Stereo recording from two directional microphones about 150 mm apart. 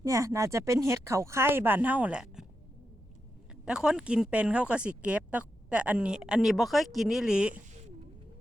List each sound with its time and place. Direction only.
0.0 s speech: 20° right (ahead or behind); by 2.5 s 5° right (ahead or behind)
3.7 s speech: 5° right (ahead or behind)